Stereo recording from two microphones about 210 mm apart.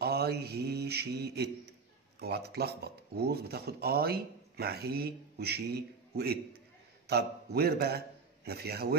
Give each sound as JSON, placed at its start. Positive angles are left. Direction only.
{"t": 0.0, "sound": "mantra", "side_deg": -50}
{"t": 7.1, "sound": "a man's voice", "side_deg": -50}